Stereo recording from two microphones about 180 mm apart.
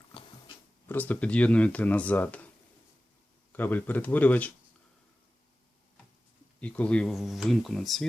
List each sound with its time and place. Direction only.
0.1 s a sound: 30° left (ahead or behind)
0.9 s speech: 10° left (ahead or behind)
3.5 s speech: 10° left (ahead or behind)
6.6 s speech: 5° left (ahead or behind)